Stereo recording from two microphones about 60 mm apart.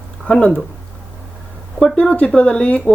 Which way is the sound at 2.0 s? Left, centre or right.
Centre.